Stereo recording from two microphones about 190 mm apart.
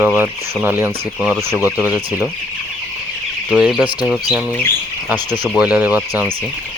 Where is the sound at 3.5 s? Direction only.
5° right (ahead or behind).